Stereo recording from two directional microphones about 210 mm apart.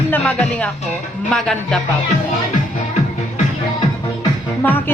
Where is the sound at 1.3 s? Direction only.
5° left (ahead or behind).